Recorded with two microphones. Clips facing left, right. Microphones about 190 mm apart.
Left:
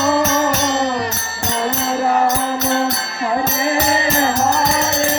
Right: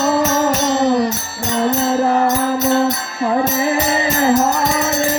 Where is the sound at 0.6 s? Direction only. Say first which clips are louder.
Right 4 dB; 85° left.